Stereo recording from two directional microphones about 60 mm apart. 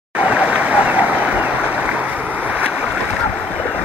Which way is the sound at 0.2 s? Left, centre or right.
Right.